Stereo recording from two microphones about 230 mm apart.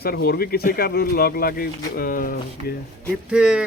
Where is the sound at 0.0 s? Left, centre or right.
Left.